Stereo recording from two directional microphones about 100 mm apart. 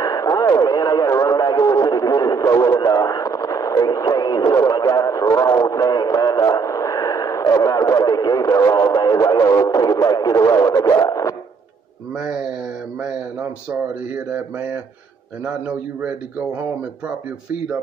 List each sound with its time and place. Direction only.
0.0 s radio: 40° left (ahead or behind)
12.2 s a man's voice: 5° right (ahead or behind)
14.3 s a man's voice: 15° right (ahead or behind)